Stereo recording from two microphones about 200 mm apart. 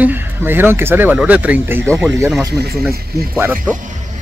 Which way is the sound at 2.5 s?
55° right (ahead or behind).